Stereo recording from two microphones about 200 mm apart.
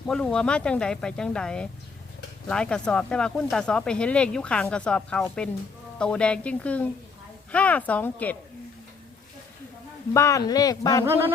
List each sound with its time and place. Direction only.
0.1 s speech: 5° left (ahead or behind)
10.2 s speech: 15° left (ahead or behind)